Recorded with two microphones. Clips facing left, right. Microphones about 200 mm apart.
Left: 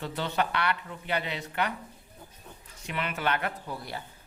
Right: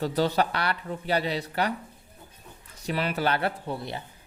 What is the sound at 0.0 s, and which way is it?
Speech, 40° right (ahead or behind).